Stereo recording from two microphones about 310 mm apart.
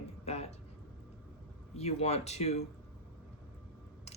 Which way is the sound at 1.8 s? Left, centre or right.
Left.